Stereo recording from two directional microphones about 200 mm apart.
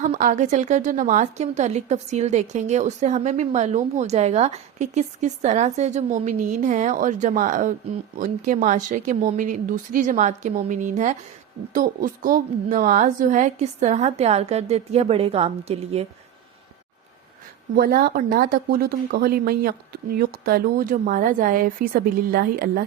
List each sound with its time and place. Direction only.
0.0 s a woman's voice: 40° right (ahead or behind)
17.7 s speech: 50° right (ahead or behind)